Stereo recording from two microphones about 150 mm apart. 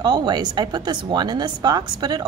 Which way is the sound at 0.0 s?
30° right (ahead or behind).